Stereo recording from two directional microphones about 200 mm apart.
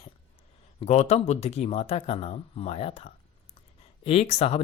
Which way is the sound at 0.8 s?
30° left (ahead or behind).